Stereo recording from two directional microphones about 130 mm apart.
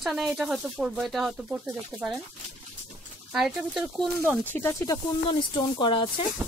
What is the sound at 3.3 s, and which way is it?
Speech, 5° right (ahead or behind).